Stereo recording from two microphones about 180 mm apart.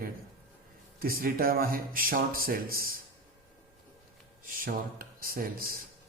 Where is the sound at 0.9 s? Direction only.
55° right (ahead or behind).